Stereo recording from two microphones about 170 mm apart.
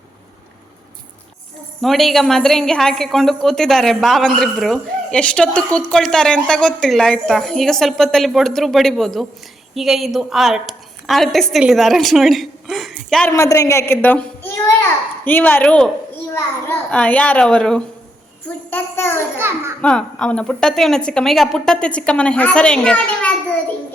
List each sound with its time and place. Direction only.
1.8 s a woman's voice: centre (ahead or behind)
13.3 s a child's voice: 15° left (ahead or behind)
19.4 s a child's voice: 15° right (ahead or behind)
19.8 s a woman's voice: 5° left (ahead or behind)